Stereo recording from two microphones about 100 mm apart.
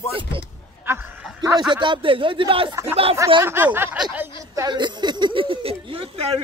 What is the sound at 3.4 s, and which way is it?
Speech, 20° right (ahead or behind).